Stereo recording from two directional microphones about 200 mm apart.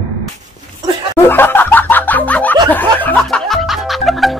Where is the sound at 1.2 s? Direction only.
10° left (ahead or behind).